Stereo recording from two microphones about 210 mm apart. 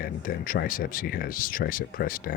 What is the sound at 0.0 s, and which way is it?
Speech, 45° left (ahead or behind).